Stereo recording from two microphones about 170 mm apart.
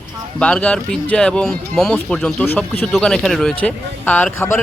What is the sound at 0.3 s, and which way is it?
A man's voice, 5° left (ahead or behind).